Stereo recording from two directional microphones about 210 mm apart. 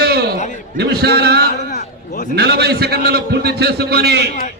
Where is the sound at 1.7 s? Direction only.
40° left (ahead or behind).